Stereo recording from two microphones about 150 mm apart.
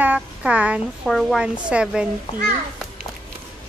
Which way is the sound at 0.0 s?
10° right (ahead or behind).